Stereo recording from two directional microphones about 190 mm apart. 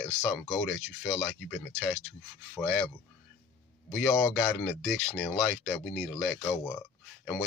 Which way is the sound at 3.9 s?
5° left (ahead or behind).